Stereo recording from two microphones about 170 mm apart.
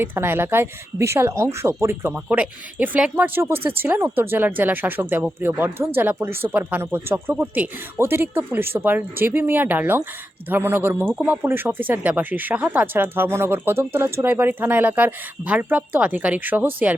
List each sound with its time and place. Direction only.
0.0 s speech: 15° right (ahead or behind)